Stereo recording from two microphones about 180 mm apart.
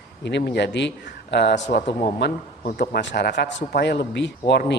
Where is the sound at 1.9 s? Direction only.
35° left (ahead or behind).